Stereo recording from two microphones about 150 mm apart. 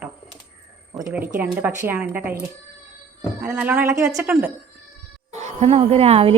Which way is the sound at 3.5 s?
10° right (ahead or behind).